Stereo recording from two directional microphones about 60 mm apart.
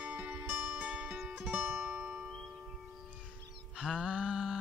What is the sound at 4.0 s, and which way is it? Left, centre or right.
Mantra, centre.